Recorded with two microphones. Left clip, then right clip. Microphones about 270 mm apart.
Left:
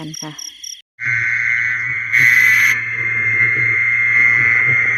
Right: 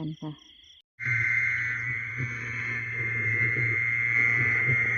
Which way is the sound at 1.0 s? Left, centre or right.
Centre.